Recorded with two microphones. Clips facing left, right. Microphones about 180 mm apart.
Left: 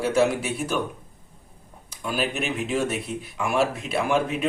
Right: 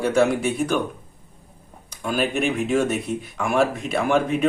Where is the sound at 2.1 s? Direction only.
Centre (ahead or behind).